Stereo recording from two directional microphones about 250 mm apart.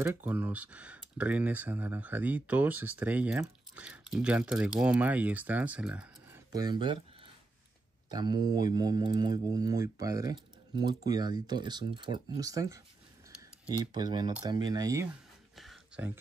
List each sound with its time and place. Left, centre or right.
0.0 s speech: centre
8.1 s speech: centre
13.9 s speech: centre
15.5 s a sound: centre